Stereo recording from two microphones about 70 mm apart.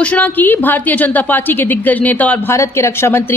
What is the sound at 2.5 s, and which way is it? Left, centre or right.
Speech, left.